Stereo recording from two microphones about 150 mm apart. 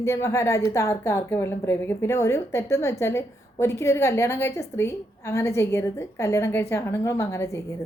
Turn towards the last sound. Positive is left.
turn(degrees=20)  # may be behind; listen again after turning